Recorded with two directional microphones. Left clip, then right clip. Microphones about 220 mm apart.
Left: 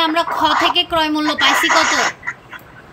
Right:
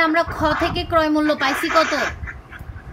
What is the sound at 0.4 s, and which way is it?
A woman's voice, 30° right (ahead or behind).